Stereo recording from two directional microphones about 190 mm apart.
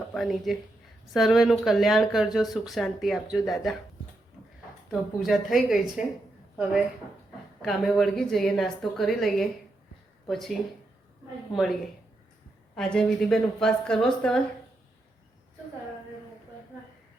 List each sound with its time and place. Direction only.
0.1 s speech: centre (ahead or behind)
4.9 s speech: centre (ahead or behind)
7.6 s speech: centre (ahead or behind)
11.5 s speech: centre (ahead or behind)